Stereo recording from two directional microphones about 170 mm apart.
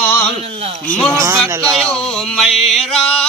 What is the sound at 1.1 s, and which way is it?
Speech, 15° right (ahead or behind).